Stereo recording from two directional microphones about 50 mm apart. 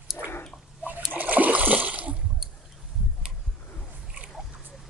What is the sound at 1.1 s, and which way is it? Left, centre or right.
Splash, right.